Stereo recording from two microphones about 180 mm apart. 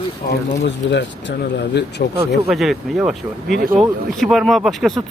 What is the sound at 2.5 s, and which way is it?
A man's voice, centre (ahead or behind).